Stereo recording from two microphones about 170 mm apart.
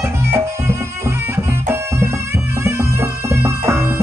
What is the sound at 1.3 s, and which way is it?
Music, 15° right (ahead or behind).